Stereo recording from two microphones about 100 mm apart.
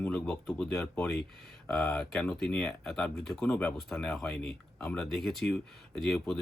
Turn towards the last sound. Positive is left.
turn(degrees=0)  # may be behind; listen again after turning